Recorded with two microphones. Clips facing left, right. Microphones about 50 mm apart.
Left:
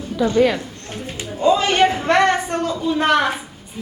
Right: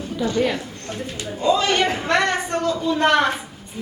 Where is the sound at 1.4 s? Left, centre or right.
Left.